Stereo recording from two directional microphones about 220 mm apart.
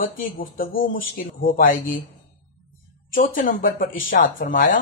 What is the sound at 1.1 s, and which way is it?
Speech, 40° left (ahead or behind).